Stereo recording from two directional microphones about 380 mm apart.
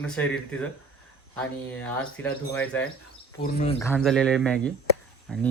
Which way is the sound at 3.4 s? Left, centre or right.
Centre.